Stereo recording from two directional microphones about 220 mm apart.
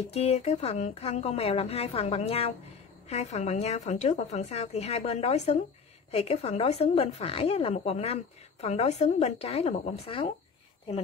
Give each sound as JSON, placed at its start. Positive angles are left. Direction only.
{"t": 0.1, "sound": "speech", "side_deg": 30}